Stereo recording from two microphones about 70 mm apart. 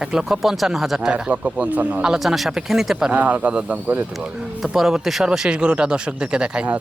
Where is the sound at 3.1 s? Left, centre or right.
Centre.